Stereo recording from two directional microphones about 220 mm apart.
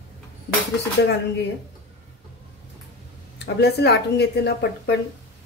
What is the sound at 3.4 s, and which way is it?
Speech, 50° left (ahead or behind).